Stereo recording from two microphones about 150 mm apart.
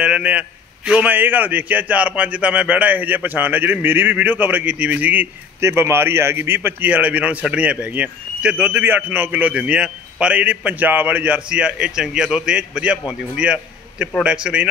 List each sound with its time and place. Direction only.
0.0 s a man's voice: 10° right (ahead or behind)